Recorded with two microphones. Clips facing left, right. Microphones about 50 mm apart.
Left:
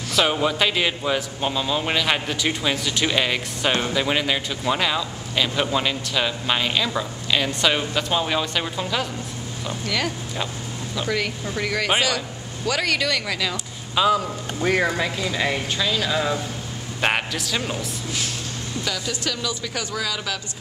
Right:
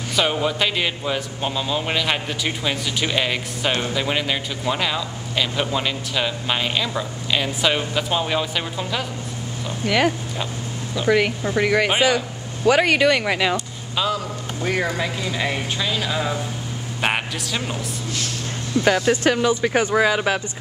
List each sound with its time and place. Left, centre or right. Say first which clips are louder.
0.1 s a man's voice: even; centre
9.8 s speech: right 8 dB; centre
13.9 s a man's voice: left 4 dB; centre
18.9 s speech: right 11 dB; right